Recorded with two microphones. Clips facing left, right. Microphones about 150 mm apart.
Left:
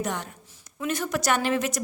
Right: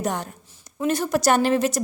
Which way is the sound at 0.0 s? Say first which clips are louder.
Right 4 dB; 40° right (ahead or behind).